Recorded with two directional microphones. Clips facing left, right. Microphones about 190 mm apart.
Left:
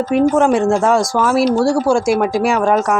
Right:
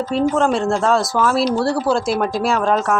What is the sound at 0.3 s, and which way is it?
Speech, 15° left (ahead or behind).